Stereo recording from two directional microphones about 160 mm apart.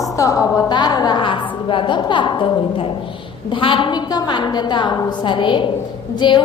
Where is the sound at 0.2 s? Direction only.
20° left (ahead or behind).